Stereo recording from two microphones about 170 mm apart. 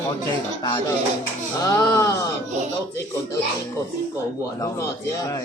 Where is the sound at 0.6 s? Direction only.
20° left (ahead or behind).